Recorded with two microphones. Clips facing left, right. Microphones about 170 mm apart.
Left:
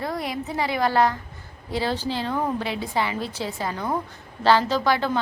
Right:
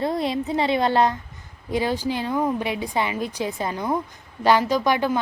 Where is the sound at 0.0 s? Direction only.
25° right (ahead or behind).